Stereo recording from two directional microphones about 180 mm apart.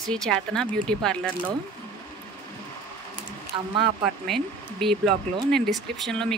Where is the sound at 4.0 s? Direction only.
Centre (ahead or behind).